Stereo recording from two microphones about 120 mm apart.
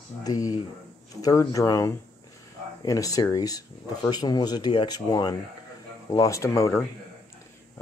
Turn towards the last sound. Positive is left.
turn(degrees=25)  # may be behind; listen again after turning